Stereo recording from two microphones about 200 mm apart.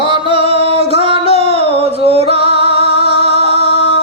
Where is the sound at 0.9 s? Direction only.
30° right (ahead or behind).